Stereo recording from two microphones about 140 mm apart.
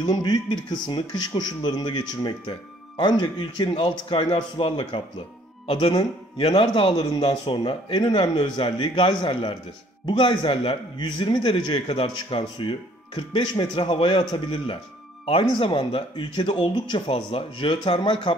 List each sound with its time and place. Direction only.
0.0 s a man's voice: 30° left (ahead or behind)